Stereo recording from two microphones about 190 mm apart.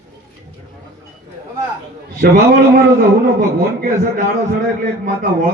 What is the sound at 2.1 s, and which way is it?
A man's voice, 50° right (ahead or behind).